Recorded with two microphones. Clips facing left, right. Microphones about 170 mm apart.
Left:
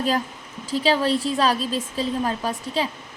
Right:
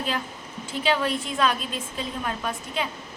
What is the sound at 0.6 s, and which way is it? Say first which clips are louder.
A woman's voice: left 4 dB; 35° left (ahead or behind).